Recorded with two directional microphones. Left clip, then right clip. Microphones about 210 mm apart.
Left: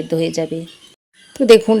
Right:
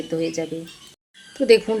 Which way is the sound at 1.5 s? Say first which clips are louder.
Left 6 dB; 45° left (ahead or behind).